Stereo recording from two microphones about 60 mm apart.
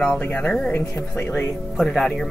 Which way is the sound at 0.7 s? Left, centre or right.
Left.